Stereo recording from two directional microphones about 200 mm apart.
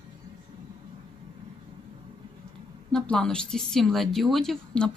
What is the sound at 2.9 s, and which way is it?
A woman's voice, 5° left (ahead or behind).